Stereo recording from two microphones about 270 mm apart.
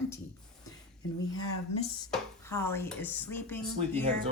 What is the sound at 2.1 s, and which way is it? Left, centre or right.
Speech, centre.